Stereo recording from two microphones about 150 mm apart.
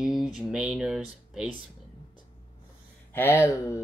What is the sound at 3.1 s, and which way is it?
Speech, 15° left (ahead or behind).